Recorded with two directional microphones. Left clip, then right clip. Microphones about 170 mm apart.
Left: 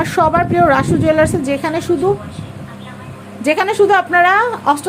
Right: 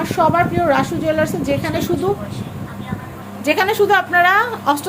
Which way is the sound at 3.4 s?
40° left (ahead or behind).